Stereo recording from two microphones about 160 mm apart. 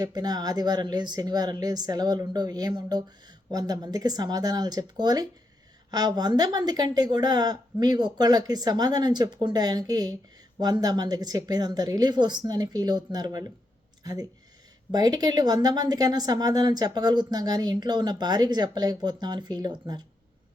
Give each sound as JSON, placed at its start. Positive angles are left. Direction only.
{"t": 0.0, "sound": "speech", "side_deg": -25}